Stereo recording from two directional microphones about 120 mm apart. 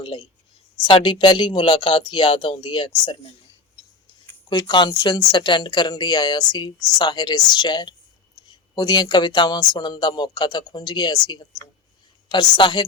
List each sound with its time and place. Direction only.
0.0 s speech: 45° left (ahead or behind)
4.4 s speech: 40° left (ahead or behind)